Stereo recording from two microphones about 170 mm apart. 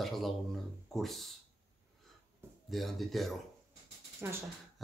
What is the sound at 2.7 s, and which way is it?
Speech, centre (ahead or behind).